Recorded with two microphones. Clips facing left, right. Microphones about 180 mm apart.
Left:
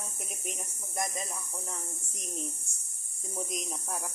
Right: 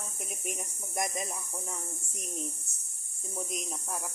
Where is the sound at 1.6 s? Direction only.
Centre (ahead or behind).